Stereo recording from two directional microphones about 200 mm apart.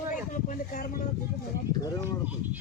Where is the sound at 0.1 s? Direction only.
40° left (ahead or behind).